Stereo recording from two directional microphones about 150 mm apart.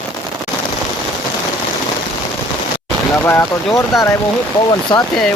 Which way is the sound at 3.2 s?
15° left (ahead or behind).